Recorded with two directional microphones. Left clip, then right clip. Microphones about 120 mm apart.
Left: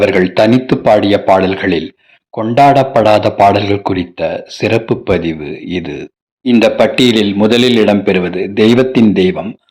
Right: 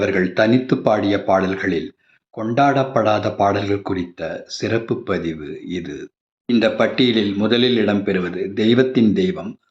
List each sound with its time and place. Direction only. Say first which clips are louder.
0.0 s a man's voice: left 8 dB; 45° left (ahead or behind)
6.5 s a man's voice: left 8 dB; 50° left (ahead or behind)